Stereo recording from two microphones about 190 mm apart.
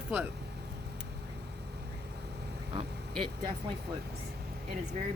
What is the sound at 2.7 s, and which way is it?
Speech, 25° right (ahead or behind).